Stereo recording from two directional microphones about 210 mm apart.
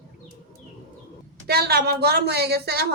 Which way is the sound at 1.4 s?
50° right (ahead or behind).